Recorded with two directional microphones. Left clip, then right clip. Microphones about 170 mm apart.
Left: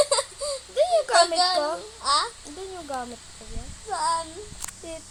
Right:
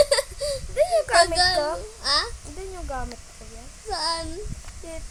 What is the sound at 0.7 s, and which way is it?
Baby cry, 5° right (ahead or behind).